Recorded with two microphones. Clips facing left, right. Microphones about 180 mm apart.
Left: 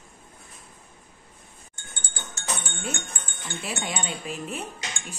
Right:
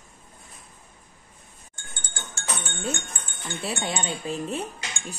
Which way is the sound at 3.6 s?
30° right (ahead or behind).